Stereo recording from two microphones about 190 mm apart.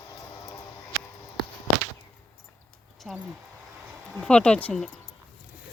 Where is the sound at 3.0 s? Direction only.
5° right (ahead or behind).